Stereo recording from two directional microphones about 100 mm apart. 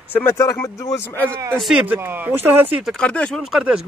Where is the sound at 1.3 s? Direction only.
30° right (ahead or behind).